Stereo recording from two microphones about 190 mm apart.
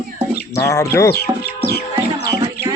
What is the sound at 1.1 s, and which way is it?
Music, 55° left (ahead or behind).